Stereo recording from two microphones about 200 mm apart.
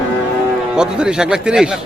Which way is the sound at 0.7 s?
5° right (ahead or behind).